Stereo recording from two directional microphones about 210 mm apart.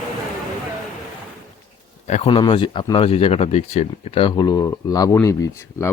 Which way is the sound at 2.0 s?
30° left (ahead or behind).